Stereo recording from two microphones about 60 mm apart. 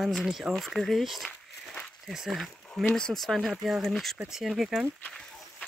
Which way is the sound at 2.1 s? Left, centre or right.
Centre.